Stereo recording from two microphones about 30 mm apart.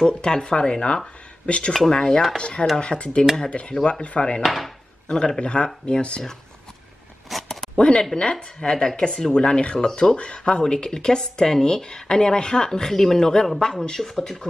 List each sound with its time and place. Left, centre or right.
0.0 s speech: left
1.9 s speech: left
4.4 s speech: centre
5.1 s speech: left
7.3 s a sound: centre
7.7 s a sound: left
8.2 s speech: left
8.5 s speech: left
10.9 s speech: left
14.1 s speech: centre